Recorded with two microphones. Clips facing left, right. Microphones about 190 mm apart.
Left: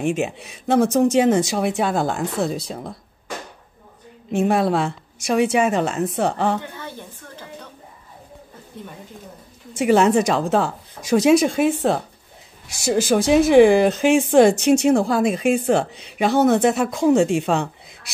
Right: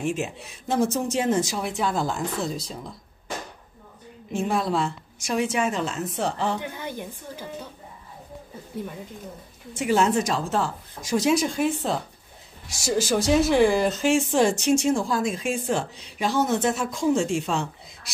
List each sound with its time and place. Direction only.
0.0 s speech: 70° left (ahead or behind)
4.3 s a woman's voice: 70° left (ahead or behind)
6.6 s a woman's voice: 15° right (ahead or behind)
9.8 s a woman's voice: 70° left (ahead or behind)